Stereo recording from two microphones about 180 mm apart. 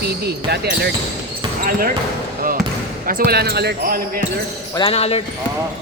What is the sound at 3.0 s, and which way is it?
Speech, 60° right (ahead or behind).